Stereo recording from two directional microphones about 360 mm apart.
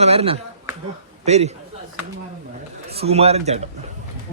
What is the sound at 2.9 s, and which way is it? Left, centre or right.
Speech, centre.